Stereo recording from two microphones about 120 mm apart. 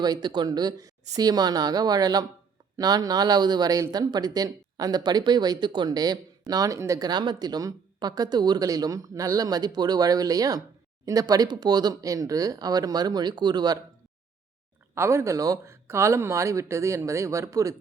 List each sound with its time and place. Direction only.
0.0 s speech: 35° right (ahead or behind)
14.9 s speech: 25° right (ahead or behind)